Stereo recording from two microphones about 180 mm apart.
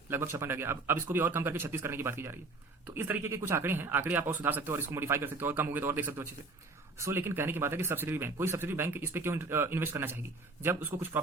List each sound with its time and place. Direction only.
0.1 s a man's voice: 15° right (ahead or behind)